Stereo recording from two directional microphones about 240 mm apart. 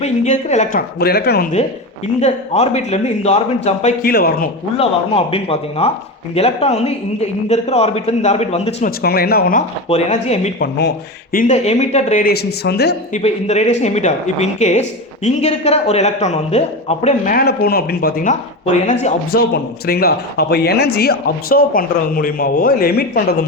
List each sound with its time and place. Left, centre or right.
0.0 s speech: left
2.2 s a woman's voice: left
4.8 s a woman's voice: left
9.0 s speech: left
10.6 s speech: left
13.1 s a woman's voice: left